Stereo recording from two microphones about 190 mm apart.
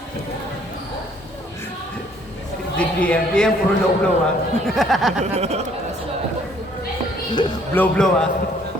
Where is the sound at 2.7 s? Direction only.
5° left (ahead or behind).